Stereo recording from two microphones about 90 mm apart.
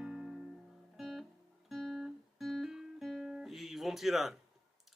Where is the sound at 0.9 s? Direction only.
Centre (ahead or behind).